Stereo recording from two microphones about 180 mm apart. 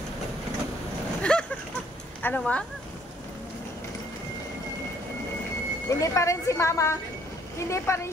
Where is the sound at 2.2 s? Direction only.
10° left (ahead or behind).